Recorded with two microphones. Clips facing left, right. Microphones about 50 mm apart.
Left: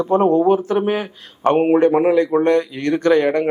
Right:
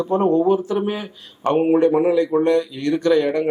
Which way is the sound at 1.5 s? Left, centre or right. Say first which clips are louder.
Left 2 dB; left.